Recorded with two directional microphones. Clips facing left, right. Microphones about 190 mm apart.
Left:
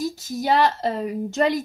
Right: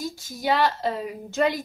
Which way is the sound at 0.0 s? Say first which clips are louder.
Left 4 dB; 40° left (ahead or behind).